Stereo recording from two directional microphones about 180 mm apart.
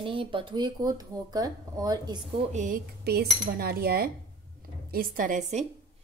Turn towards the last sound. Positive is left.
turn(degrees=-45)  # may be behind; listen again after turning